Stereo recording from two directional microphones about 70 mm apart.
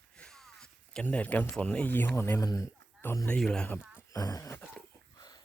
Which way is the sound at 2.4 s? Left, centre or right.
Left.